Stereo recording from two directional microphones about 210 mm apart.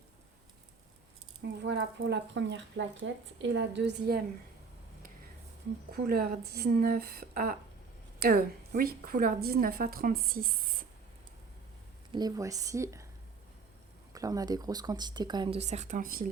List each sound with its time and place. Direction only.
1.6 s speech: 55° right (ahead or behind)
6.1 s a woman's voice: 45° right (ahead or behind)
12.1 s a woman's voice: 15° right (ahead or behind)
14.1 s speech: 15° right (ahead or behind); by 16.2 s 40° right (ahead or behind)